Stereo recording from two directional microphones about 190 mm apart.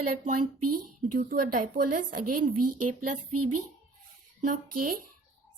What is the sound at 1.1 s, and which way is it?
A woman's voice, 50° right (ahead or behind).